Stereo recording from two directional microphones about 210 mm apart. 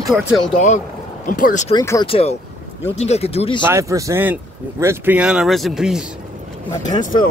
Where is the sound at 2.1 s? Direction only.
30° left (ahead or behind).